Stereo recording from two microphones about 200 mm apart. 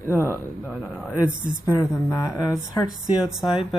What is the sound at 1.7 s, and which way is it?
A woman's voice, 15° left (ahead or behind).